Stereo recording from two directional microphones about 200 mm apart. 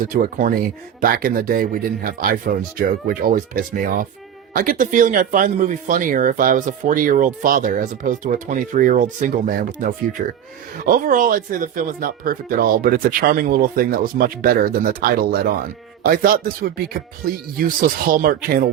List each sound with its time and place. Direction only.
0.2 s speech: 45° right (ahead or behind)